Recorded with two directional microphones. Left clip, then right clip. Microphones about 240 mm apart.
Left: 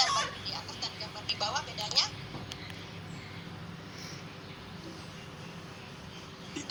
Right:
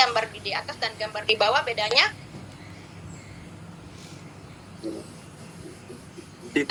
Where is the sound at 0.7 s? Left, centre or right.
Right.